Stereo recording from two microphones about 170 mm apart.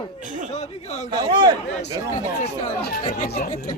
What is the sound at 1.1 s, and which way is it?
Speech, 25° right (ahead or behind).